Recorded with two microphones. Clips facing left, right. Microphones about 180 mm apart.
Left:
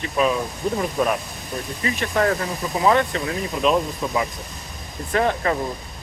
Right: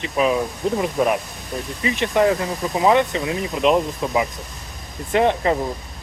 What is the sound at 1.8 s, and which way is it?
Speech, 15° right (ahead or behind).